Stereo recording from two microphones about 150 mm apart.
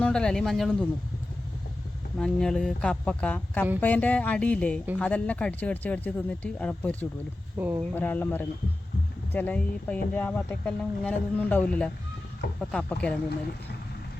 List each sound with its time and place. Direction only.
0.0 s speech: 5° left (ahead or behind)
2.1 s speech: 5° left (ahead or behind)
7.6 s speech: 20° right (ahead or behind)
7.9 s speech: 15° left (ahead or behind)